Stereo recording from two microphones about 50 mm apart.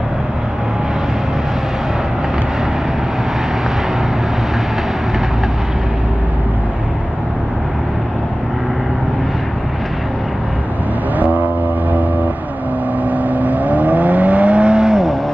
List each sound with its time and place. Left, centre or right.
11.1 s music: right
13.1 s vehicle: right; by 15.0 s centre